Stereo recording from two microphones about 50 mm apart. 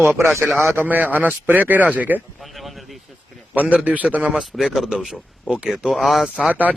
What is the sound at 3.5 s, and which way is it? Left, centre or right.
Speech, right.